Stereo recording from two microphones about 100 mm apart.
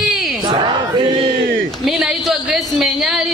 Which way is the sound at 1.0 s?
65° right (ahead or behind).